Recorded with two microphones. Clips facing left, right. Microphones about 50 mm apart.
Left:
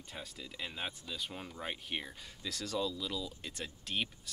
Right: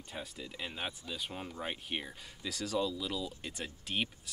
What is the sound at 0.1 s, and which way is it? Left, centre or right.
Speech, centre.